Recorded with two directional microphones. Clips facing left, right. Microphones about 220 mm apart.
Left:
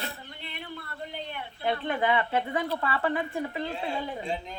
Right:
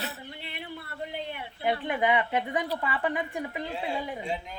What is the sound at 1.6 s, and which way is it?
A woman's voice, 15° right (ahead or behind).